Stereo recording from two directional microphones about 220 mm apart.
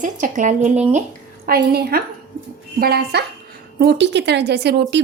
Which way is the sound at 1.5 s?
45° right (ahead or behind).